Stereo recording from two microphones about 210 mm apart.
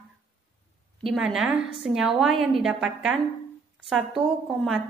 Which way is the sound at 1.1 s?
Centre (ahead or behind).